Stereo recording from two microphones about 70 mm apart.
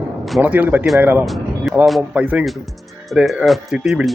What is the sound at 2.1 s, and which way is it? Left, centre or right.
Speech, centre.